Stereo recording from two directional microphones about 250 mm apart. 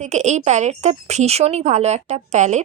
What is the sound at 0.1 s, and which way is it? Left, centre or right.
A woman's voice, right.